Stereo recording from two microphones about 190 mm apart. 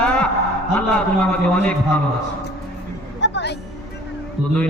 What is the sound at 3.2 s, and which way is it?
Music, 65° left (ahead or behind).